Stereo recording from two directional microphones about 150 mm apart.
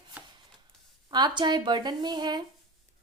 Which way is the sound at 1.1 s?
30° right (ahead or behind).